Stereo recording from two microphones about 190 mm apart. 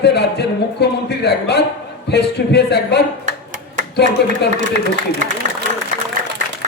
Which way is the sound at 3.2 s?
40° right (ahead or behind).